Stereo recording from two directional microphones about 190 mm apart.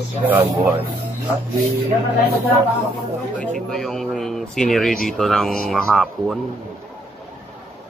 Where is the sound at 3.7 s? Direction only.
5° left (ahead or behind).